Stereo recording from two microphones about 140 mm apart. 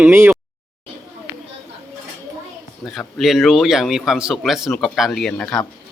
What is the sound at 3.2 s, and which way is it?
A man's voice, centre (ahead or behind).